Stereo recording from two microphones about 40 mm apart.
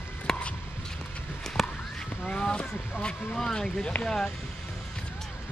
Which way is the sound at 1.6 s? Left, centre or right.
Centre.